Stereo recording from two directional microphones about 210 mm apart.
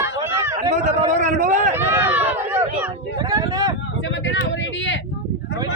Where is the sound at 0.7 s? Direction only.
35° right (ahead or behind).